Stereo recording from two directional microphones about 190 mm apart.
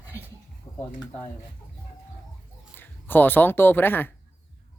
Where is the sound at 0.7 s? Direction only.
20° left (ahead or behind).